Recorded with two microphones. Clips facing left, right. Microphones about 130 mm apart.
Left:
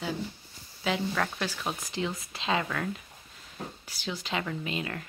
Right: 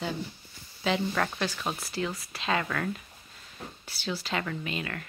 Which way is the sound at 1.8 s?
15° left (ahead or behind).